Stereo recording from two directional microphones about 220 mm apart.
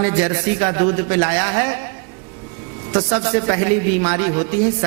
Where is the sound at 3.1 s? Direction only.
20° right (ahead or behind).